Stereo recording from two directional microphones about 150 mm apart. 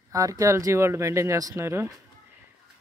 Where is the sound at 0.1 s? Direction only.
20° right (ahead or behind).